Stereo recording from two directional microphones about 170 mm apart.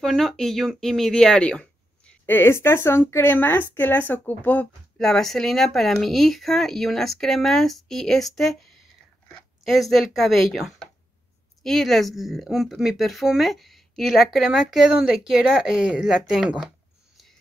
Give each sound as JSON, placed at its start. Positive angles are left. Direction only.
{"t": 0.0, "sound": "speech", "side_deg": 0}
{"t": 9.7, "sound": "speech", "side_deg": 0}